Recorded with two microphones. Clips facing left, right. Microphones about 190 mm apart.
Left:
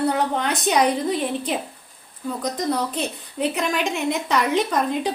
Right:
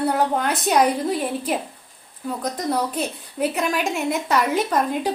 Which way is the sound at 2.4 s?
5° right (ahead or behind).